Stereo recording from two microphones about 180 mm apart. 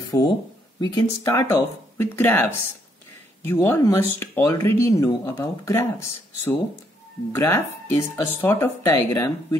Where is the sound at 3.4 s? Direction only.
15° left (ahead or behind).